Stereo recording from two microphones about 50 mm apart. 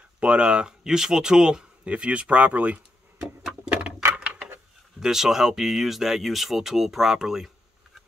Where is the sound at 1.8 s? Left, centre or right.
Right.